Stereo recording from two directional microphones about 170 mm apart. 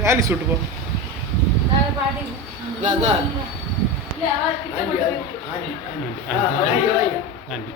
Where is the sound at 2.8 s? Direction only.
45° right (ahead or behind).